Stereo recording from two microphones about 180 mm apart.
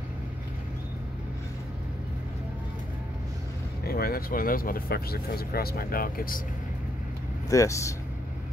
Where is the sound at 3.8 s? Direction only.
55° left (ahead or behind).